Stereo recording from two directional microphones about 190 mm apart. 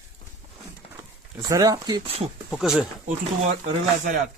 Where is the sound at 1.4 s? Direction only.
20° right (ahead or behind).